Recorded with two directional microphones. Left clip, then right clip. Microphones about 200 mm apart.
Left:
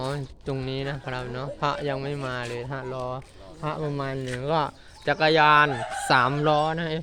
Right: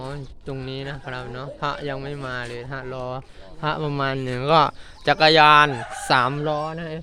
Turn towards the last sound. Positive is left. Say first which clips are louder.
# left 3 dB
turn(degrees=15)  # may be behind; listen again after turning